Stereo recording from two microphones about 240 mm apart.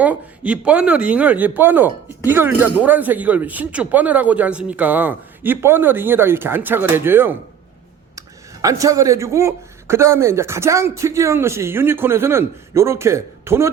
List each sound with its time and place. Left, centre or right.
0.0 s speech: centre
8.6 s speech: centre